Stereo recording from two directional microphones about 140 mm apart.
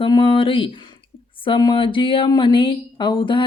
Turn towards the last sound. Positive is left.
turn(degrees=35)  # may be behind; listen again after turning